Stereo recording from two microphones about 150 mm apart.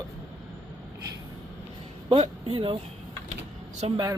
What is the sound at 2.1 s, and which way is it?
Speech, 40° right (ahead or behind).